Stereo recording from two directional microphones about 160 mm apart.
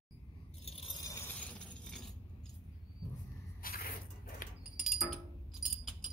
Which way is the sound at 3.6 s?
65° left (ahead or behind).